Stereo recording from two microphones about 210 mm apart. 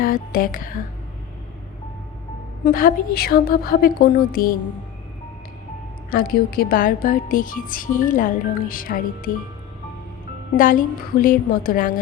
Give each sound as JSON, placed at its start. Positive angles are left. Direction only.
{"t": 0.0, "sound": "speech", "side_deg": 45}
{"t": 2.6, "sound": "a woman's voice", "side_deg": 45}
{"t": 6.1, "sound": "speech", "side_deg": 45}
{"t": 10.6, "sound": "speech", "side_deg": 40}